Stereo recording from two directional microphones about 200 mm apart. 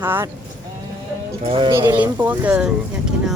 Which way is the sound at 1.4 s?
25° right (ahead or behind).